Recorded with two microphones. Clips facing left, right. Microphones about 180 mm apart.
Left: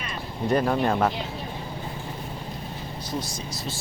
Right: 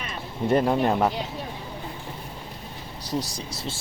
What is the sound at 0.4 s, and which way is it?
Speech, 20° right (ahead or behind).